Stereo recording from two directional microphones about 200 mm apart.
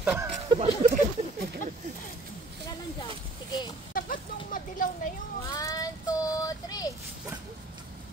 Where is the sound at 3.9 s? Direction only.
45° left (ahead or behind).